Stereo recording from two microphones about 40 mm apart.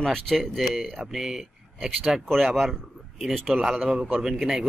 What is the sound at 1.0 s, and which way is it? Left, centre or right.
Speech, centre.